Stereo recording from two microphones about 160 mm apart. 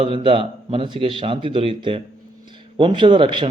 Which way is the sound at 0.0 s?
35° right (ahead or behind).